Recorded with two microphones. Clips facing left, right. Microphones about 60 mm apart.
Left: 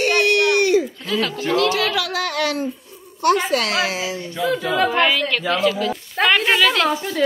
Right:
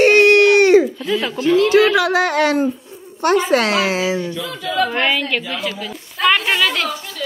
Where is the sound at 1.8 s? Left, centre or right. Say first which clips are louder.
Right 8 dB; right.